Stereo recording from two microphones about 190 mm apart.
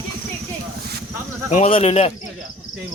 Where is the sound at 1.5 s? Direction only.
35° left (ahead or behind).